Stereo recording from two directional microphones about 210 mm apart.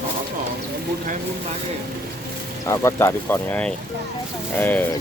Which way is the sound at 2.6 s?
15° left (ahead or behind).